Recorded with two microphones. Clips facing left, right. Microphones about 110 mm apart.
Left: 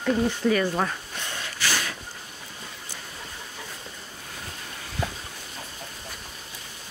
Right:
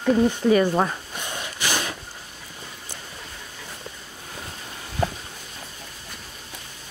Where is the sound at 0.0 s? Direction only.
20° right (ahead or behind).